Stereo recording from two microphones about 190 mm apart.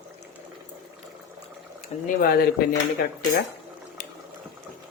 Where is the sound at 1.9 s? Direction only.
35° left (ahead or behind).